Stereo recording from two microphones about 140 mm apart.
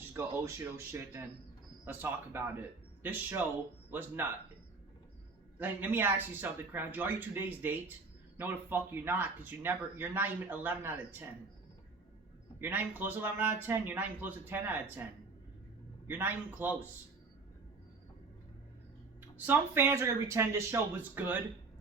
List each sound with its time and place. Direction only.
0.1 s speech: 15° right (ahead or behind)
5.5 s speech: 15° right (ahead or behind)
12.5 s speech: 15° right (ahead or behind)
16.0 s speech: 15° right (ahead or behind)
19.5 s speech: 15° right (ahead or behind)